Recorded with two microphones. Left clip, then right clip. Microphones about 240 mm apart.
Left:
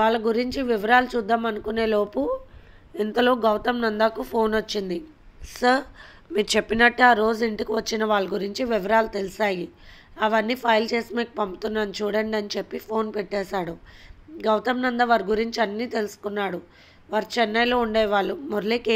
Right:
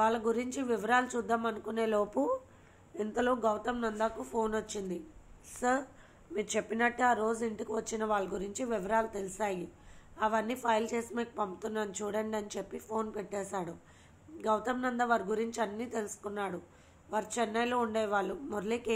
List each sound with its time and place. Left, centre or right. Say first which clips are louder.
0.0 s a woman's voice: left 9 dB; left